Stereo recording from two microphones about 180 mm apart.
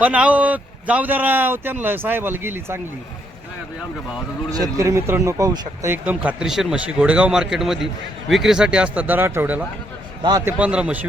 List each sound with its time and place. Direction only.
0.0 s speech: 5° right (ahead or behind)
4.5 s speech: 20° right (ahead or behind)
10.2 s a man's voice: 20° right (ahead or behind)
10.6 s a man's voice: 5° right (ahead or behind)